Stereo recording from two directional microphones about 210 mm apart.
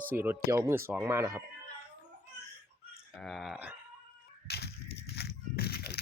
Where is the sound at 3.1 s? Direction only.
Centre (ahead or behind).